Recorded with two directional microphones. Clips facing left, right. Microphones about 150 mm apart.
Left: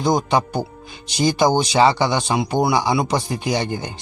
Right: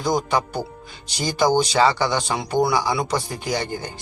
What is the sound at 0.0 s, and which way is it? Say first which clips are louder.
Speech: left 3 dB; 20° left (ahead or behind).